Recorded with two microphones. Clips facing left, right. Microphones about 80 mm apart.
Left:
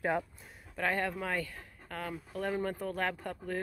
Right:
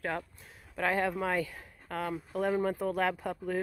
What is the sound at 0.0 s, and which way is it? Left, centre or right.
Speech, centre.